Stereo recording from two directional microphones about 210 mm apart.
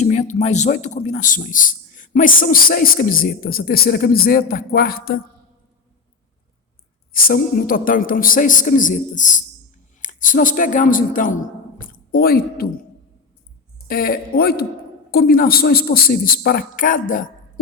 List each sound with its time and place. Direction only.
0.0 s a man's voice: 30° left (ahead or behind)
7.1 s a man's voice: 45° left (ahead or behind)
11.8 s a sound: 45° left (ahead or behind)
13.8 s a man's voice: 45° left (ahead or behind)